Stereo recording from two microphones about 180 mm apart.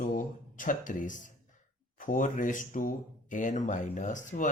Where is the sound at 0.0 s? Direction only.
50° left (ahead or behind).